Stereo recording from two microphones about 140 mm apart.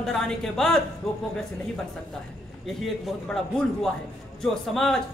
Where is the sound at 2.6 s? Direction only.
Centre (ahead or behind).